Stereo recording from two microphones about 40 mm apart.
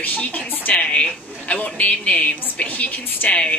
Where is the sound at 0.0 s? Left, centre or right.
Left.